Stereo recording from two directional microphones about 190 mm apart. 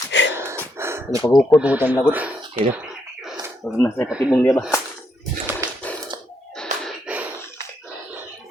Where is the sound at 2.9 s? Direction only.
Centre (ahead or behind).